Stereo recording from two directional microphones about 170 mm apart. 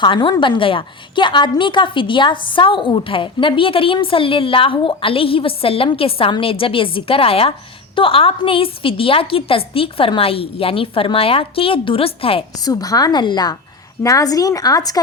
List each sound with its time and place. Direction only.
0.0 s a woman's voice: 30° left (ahead or behind)
12.5 s a woman's voice: 20° left (ahead or behind)